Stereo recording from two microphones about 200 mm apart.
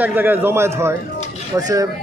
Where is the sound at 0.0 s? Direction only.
10° right (ahead or behind).